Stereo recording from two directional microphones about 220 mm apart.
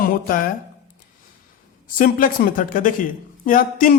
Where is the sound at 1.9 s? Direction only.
40° left (ahead or behind).